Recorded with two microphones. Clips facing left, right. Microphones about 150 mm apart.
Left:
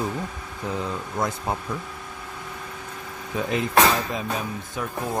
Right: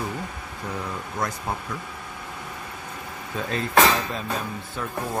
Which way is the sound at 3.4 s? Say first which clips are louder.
Even; 15° left (ahead or behind).